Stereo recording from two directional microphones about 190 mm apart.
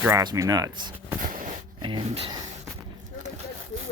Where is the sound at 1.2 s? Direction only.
45° right (ahead or behind).